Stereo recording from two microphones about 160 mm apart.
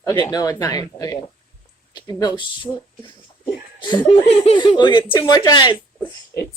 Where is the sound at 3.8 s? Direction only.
30° left (ahead or behind).